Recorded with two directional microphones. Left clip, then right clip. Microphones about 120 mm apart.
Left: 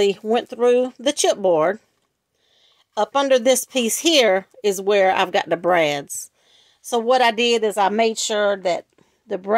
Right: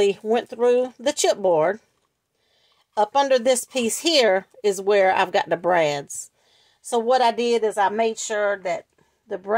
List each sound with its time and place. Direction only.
0.0 s a woman's voice: 20° left (ahead or behind)
2.9 s a woman's voice: 15° left (ahead or behind)
7.1 s speech: 30° left (ahead or behind); by 8.0 s 50° left (ahead or behind)
8.0 s speech: 90° left
9.3 s speech: 50° left (ahead or behind)